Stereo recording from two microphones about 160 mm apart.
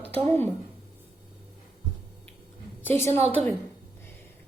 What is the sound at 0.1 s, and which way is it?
Speech, 10° left (ahead or behind).